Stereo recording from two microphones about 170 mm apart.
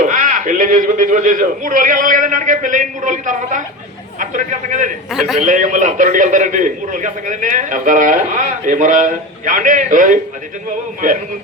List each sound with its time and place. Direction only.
0.0 s a man's voice: 50° right (ahead or behind)
5.1 s a man's voice: centre (ahead or behind)
5.4 s a man's voice: 50° right (ahead or behind)